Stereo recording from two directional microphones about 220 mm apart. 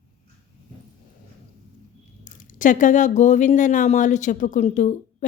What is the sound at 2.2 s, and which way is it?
Speech, 35° left (ahead or behind).